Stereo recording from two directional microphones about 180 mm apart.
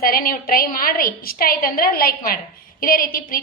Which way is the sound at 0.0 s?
55° left (ahead or behind).